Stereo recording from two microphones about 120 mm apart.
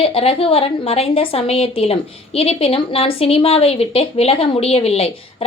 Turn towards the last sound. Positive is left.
turn(degrees=55)  # may be behind; listen again after turning